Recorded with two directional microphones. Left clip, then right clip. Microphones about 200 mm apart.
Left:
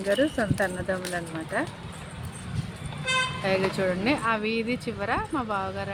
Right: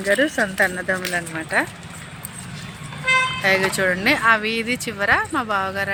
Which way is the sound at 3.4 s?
5° right (ahead or behind).